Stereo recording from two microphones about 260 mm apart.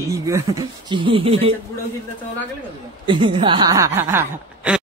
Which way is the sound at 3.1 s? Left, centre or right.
Centre.